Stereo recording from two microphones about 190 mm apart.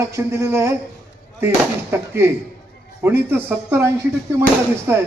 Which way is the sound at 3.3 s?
10° right (ahead or behind).